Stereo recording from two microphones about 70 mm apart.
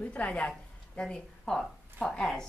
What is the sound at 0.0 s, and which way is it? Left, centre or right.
A woman's voice, centre.